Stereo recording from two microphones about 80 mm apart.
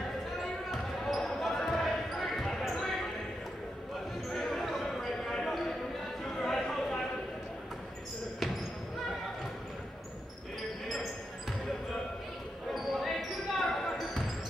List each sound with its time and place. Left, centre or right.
0.4 s basketball bounce: centre
4.3 s basketball bounce: centre
6.4 s chatter: centre
12.7 s basketball bounce: centre